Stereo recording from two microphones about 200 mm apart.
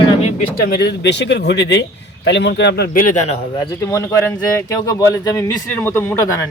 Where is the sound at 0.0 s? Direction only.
30° left (ahead or behind).